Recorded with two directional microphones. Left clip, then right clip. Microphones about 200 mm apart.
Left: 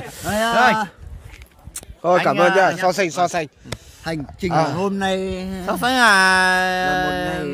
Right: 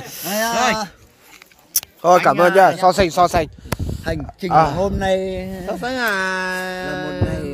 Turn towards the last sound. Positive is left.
turn(degrees=-25)  # may be behind; listen again after turning